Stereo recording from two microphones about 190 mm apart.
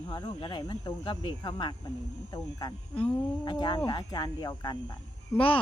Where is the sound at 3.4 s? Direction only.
25° left (ahead or behind).